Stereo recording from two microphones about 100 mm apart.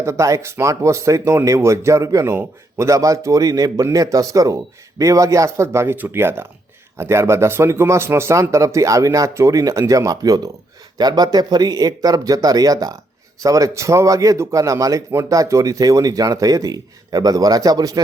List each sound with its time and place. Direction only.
0.0 s a man's voice: 30° right (ahead or behind)